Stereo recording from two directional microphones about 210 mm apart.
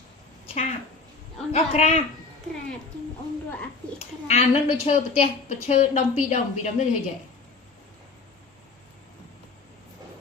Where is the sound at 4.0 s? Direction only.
30° left (ahead or behind).